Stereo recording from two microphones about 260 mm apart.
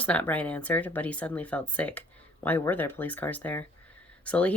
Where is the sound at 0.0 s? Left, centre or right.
Centre.